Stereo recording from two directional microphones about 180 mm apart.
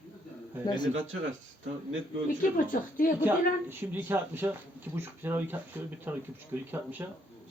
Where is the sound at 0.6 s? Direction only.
25° left (ahead or behind).